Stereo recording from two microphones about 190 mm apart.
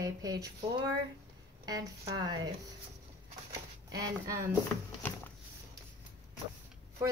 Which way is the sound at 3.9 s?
20° right (ahead or behind).